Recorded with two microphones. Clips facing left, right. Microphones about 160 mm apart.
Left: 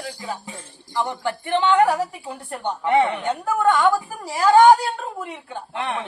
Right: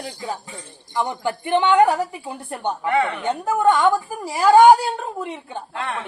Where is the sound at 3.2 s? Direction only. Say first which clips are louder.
Right 2 dB; 20° right (ahead or behind).